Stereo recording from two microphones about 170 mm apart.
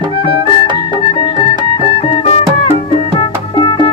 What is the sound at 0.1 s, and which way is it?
Music, 35° left (ahead or behind).